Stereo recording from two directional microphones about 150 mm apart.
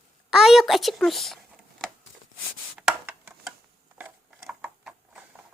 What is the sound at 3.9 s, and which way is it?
Mechanisms, 10° right (ahead or behind).